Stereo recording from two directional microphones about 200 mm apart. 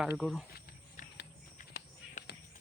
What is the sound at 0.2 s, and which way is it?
Speech, centre (ahead or behind).